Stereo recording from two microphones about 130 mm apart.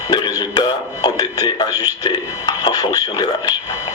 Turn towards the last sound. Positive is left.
turn(degrees=30)  # may be behind; listen again after turning